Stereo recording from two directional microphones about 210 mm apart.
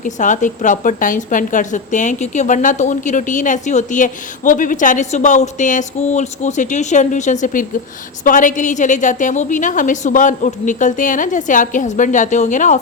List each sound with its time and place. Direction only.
0.0 s a woman's voice: 35° left (ahead or behind)